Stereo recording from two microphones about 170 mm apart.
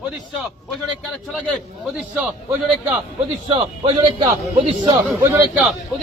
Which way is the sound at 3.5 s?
30° right (ahead or behind).